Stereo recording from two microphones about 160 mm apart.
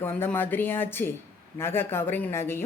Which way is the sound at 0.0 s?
15° left (ahead or behind).